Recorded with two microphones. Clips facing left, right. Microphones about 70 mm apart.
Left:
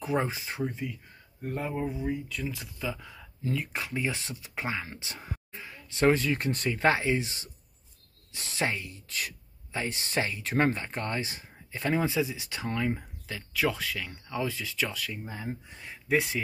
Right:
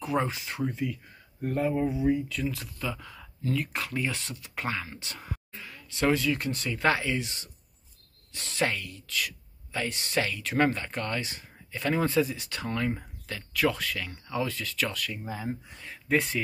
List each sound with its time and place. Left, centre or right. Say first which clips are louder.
0.0 s speech: right 1 dB; left
8.6 s speech: right 1 dB; left
11.9 s speech: right 2 dB; centre
15.2 s speech: right 3 dB; centre
15.8 s speech: even; centre